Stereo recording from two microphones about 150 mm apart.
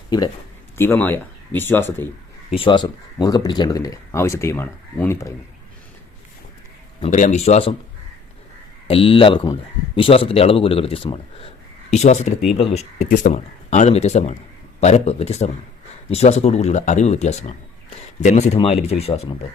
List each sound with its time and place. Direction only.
0.8 s speech: 15° left (ahead or behind)
2.6 s speech: 30° left (ahead or behind); by 5.3 s 15° left (ahead or behind)
7.0 s speech: 55° left (ahead or behind)
8.9 s speech: 40° left (ahead or behind)
11.9 s speech: 50° left (ahead or behind)